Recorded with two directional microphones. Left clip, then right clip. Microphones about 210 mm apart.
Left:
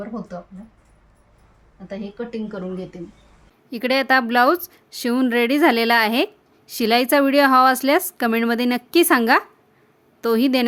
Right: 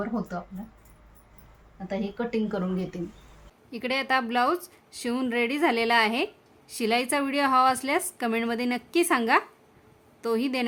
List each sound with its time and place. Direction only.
0.0 s speech: 10° left (ahead or behind)
1.9 s speech: 5° left (ahead or behind)
3.7 s speech: 35° left (ahead or behind)